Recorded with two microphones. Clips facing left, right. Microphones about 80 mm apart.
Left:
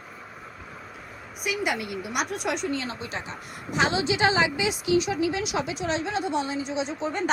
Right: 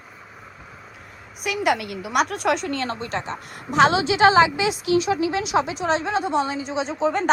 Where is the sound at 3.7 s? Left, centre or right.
Right.